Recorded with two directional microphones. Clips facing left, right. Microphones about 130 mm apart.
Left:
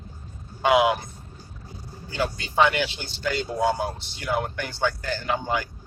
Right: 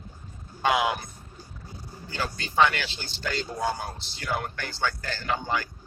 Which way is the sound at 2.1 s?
15° left (ahead or behind).